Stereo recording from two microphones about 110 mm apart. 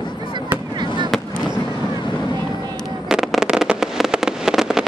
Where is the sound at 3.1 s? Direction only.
5° right (ahead or behind).